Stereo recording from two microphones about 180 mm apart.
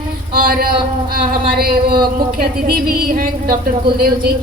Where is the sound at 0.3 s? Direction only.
55° right (ahead or behind).